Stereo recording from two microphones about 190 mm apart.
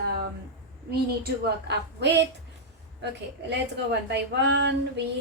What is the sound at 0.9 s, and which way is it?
A woman's voice, 55° right (ahead or behind).